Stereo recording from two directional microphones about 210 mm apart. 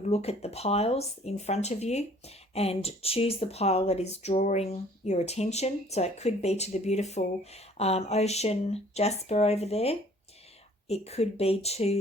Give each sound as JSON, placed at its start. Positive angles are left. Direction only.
{"t": 0.1, "sound": "speech", "side_deg": 30}